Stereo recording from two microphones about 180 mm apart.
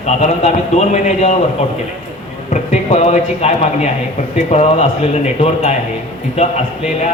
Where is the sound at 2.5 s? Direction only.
40° left (ahead or behind).